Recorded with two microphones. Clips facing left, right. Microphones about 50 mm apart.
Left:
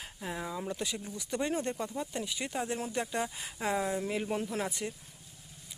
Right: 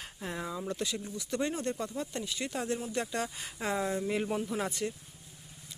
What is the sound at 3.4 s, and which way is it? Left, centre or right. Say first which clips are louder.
Speech: left 1 dB; centre.